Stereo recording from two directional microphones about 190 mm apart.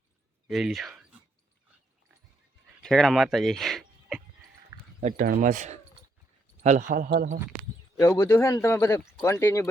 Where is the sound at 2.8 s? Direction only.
Centre (ahead or behind).